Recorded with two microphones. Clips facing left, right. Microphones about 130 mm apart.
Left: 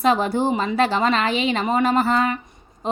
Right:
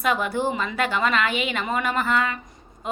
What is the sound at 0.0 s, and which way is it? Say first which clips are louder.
A woman's voice: left 4 dB; 30° left (ahead or behind).